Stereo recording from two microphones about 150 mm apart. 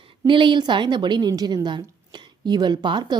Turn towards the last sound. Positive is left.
turn(degrees=-30)  # may be behind; listen again after turning